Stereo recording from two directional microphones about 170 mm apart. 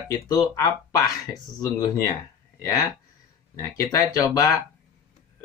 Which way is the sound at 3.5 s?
20° left (ahead or behind).